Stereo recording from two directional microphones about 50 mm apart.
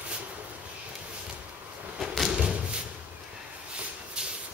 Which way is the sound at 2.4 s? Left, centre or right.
Centre.